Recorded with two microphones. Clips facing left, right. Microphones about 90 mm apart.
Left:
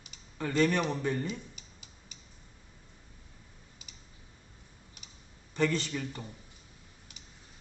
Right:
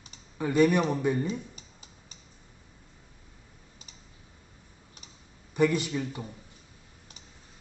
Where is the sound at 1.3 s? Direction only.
35° right (ahead or behind).